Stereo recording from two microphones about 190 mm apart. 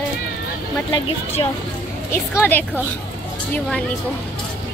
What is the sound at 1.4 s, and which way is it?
Speech, 25° left (ahead or behind).